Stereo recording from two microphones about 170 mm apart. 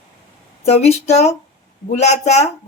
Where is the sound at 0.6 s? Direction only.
40° left (ahead or behind).